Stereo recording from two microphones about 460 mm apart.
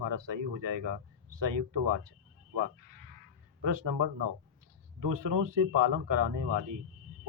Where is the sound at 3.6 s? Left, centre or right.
Right.